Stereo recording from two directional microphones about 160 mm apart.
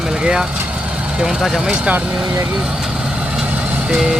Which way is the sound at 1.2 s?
Centre (ahead or behind).